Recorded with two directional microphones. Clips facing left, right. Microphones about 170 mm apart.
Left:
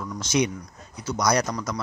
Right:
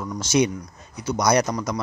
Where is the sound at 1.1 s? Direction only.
20° right (ahead or behind).